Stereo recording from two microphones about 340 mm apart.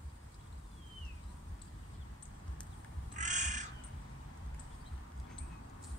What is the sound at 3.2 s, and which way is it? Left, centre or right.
Crow, right.